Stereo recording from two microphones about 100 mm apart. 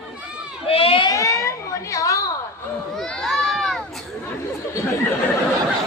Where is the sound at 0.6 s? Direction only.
70° left (ahead or behind).